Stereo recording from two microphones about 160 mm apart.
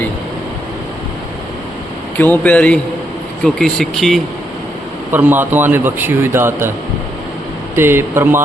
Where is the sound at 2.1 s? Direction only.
10° left (ahead or behind).